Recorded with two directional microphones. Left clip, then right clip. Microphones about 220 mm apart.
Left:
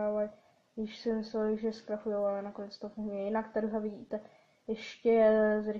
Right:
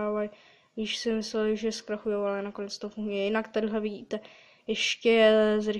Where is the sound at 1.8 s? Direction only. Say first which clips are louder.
Right 1 dB; 45° right (ahead or behind).